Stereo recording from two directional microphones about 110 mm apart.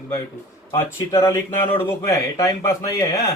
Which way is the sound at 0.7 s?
25° left (ahead or behind).